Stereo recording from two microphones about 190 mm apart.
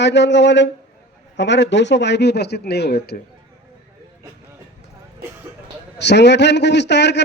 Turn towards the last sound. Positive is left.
turn(degrees=65)  # may be behind; listen again after turning